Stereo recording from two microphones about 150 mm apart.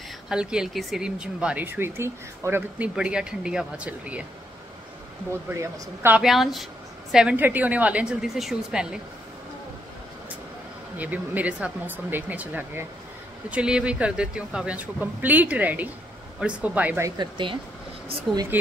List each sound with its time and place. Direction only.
0.3 s speech: 5° right (ahead or behind)
5.5 s speech: 15° right (ahead or behind)
6.2 s a woman's voice: centre (ahead or behind)
11.0 s speech: 10° right (ahead or behind)
17.2 s speech: 35° right (ahead or behind)